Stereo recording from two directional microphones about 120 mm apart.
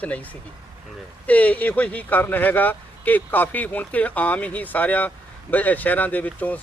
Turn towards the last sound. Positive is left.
turn(degrees=15)  # may be behind; listen again after turning